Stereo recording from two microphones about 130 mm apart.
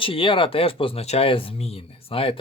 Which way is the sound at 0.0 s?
45° left (ahead or behind).